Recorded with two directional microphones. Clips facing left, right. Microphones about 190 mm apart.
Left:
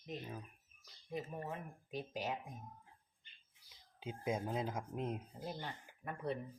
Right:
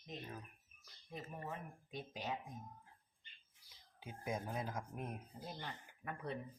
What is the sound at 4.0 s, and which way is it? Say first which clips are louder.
Speech: left 4 dB; 20° left (ahead or behind).